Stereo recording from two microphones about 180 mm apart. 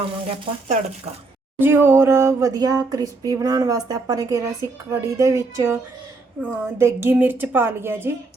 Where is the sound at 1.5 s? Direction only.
10° right (ahead or behind).